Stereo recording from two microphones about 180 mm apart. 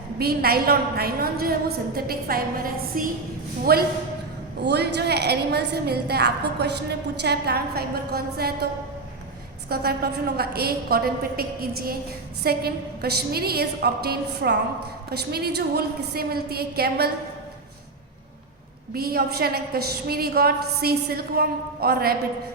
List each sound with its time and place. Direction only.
0.2 s a woman's voice: 60° right (ahead or behind)
9.6 s a woman's voice: 60° right (ahead or behind)
18.9 s a woman's voice: 60° right (ahead or behind)